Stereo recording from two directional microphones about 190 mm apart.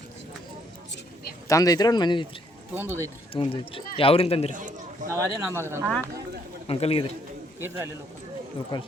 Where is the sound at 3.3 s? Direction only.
30° left (ahead or behind).